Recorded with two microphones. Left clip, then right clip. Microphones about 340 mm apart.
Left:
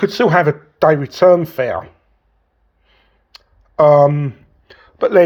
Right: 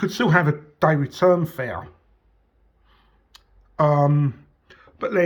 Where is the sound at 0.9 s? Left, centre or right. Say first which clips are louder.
Left 8 dB; left.